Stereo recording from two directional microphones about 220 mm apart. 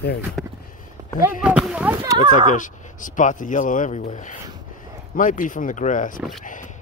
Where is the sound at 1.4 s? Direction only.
5° right (ahead or behind).